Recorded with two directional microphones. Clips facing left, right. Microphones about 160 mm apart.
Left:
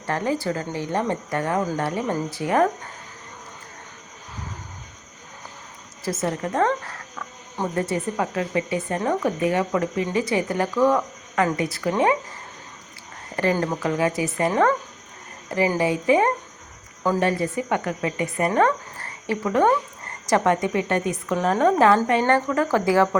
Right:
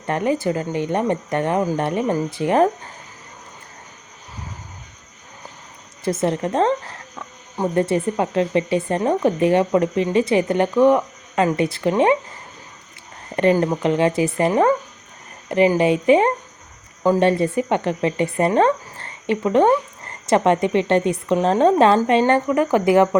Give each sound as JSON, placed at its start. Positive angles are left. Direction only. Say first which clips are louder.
{"t": 0.0, "sound": "speech", "louder": "right 4 dB", "side_deg": -20}
{"t": 6.2, "sound": "speech", "louder": "right 3 dB", "side_deg": -25}
{"t": 13.3, "sound": "speech", "louder": "right 6 dB", "side_deg": -20}